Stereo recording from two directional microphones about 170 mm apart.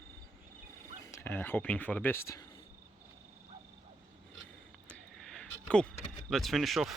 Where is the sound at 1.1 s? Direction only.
10° left (ahead or behind).